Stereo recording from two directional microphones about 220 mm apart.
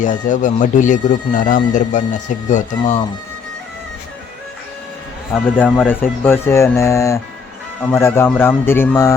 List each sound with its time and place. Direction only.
0.0 s speech: 35° left (ahead or behind)
5.3 s speech: 5° left (ahead or behind)